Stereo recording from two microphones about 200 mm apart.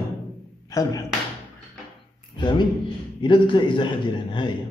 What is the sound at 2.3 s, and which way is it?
A man's voice, 20° left (ahead or behind).